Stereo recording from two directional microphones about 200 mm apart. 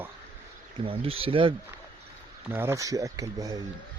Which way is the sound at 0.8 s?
25° right (ahead or behind).